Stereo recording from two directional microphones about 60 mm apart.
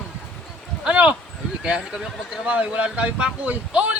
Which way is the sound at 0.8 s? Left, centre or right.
Centre.